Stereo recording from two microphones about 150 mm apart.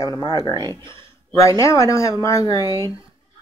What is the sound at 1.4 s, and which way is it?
Speech, 20° left (ahead or behind).